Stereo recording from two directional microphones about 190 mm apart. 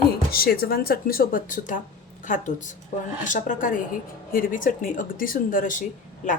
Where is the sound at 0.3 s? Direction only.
50° left (ahead or behind).